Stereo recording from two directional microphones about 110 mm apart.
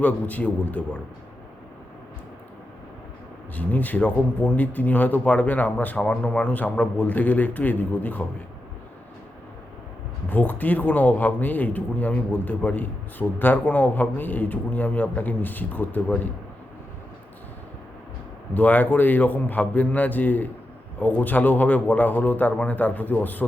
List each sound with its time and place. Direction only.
0.0 s speech: 15° left (ahead or behind)
3.5 s speech: 15° left (ahead or behind)
10.2 s speech: 15° left (ahead or behind)
18.5 s speech: 15° left (ahead or behind)